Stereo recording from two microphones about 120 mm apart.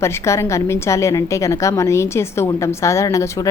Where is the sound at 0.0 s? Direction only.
25° left (ahead or behind).